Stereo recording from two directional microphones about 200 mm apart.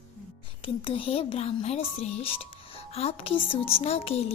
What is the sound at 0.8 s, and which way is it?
Speech, 25° left (ahead or behind).